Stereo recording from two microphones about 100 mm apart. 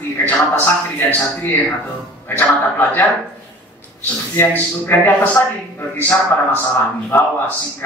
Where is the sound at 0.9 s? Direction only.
20° left (ahead or behind).